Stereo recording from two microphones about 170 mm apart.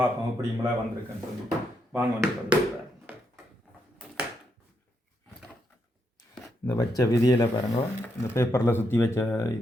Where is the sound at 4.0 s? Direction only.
5° right (ahead or behind).